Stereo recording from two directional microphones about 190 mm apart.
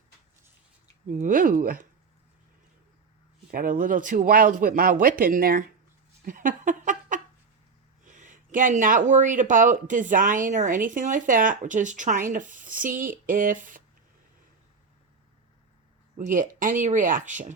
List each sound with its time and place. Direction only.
1.0 s speech: 45° right (ahead or behind)
3.5 s speech: 45° right (ahead or behind)
6.2 s a sound: 45° right (ahead or behind)
8.0 s speech: 40° right (ahead or behind)
16.1 s speech: 45° right (ahead or behind)